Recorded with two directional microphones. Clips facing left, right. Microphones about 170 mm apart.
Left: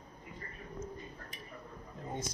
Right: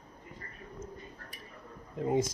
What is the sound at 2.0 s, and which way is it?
Speech, 90° right.